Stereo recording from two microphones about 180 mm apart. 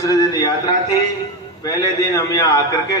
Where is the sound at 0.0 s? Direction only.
20° left (ahead or behind).